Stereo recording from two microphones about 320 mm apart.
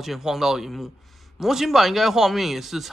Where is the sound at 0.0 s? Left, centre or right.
Centre.